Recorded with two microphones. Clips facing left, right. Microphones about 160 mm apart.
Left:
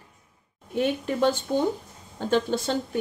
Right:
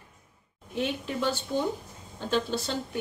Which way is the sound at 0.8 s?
45° left (ahead or behind).